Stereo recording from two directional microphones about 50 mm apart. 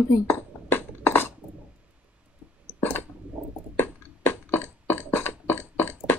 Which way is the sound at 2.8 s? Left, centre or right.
Left.